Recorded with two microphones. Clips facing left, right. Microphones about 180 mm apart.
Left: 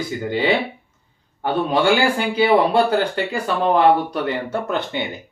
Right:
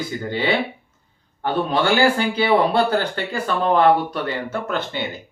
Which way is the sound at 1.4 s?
10° left (ahead or behind).